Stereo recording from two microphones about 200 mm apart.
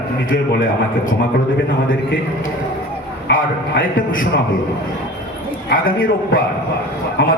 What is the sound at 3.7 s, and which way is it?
Speech, 45° left (ahead or behind).